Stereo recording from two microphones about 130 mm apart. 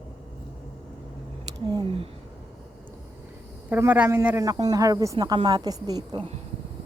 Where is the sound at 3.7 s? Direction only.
10° right (ahead or behind); by 6.2 s 30° right (ahead or behind).